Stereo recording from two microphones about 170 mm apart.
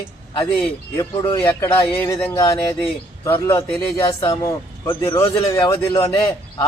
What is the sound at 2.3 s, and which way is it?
A man's voice, 20° left (ahead or behind).